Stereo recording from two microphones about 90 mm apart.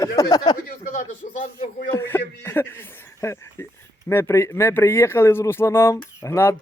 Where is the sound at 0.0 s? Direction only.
45° left (ahead or behind).